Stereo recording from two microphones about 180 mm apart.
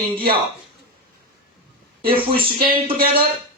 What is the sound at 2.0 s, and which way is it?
Speech, 55° right (ahead or behind).